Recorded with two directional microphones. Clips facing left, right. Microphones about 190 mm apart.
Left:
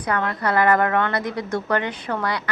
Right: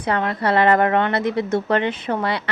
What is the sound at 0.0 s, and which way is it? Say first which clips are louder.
A woman's voice: right 2 dB; 25° right (ahead or behind).